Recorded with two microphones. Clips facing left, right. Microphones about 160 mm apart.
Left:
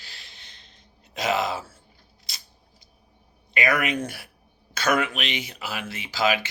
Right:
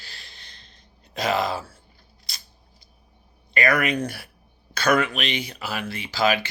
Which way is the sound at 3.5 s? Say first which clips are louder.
Right 2 dB; 15° left (ahead or behind).